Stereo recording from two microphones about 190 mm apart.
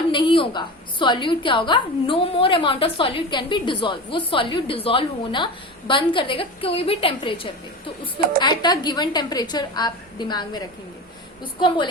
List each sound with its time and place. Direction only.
0.1 s a woman's voice: 25° left (ahead or behind)